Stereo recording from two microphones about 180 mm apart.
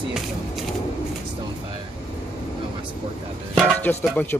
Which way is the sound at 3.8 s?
10° left (ahead or behind).